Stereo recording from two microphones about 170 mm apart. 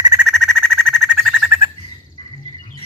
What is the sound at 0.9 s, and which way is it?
Bird, centre (ahead or behind).